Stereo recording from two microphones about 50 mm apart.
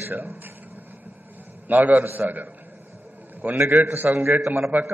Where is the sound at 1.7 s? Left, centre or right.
Right.